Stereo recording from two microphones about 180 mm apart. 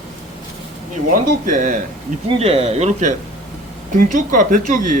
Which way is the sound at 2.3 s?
30° right (ahead or behind).